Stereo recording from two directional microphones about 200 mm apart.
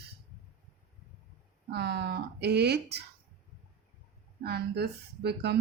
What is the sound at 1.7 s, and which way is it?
Speech, 55° right (ahead or behind).